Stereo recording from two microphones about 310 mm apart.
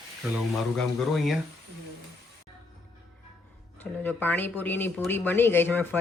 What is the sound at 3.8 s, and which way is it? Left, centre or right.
Speech, centre.